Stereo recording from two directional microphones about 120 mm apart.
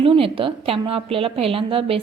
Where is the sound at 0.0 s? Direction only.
45° right (ahead or behind).